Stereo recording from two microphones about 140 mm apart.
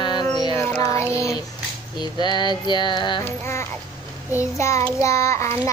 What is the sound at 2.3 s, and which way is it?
Music, 30° left (ahead or behind).